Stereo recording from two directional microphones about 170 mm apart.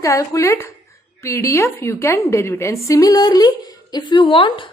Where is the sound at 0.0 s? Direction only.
20° left (ahead or behind).